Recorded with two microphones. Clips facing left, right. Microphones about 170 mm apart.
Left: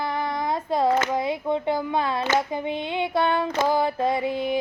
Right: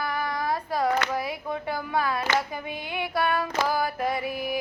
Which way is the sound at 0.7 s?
25° left (ahead or behind).